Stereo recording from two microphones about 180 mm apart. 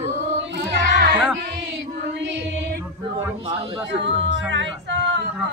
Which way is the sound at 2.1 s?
75° right (ahead or behind).